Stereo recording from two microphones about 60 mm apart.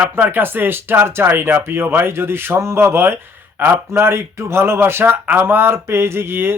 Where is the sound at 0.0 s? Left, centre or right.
Right.